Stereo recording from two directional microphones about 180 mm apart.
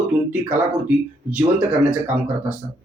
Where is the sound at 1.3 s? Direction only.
10° right (ahead or behind).